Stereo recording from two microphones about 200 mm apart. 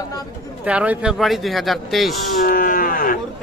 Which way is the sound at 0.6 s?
5° right (ahead or behind).